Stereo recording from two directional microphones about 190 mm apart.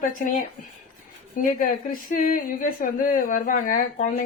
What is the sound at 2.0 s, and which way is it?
Speech, 45° left (ahead or behind).